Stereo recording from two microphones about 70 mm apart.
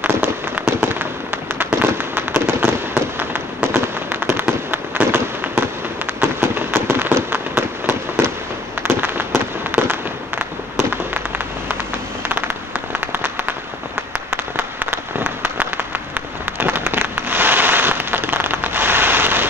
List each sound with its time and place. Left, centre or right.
0.7 s fireworks: right
6.4 s fireworks: right
14.3 s a sound: right
16.5 s fireworks: right